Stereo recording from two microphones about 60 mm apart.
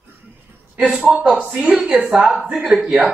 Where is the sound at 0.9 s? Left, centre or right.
Centre.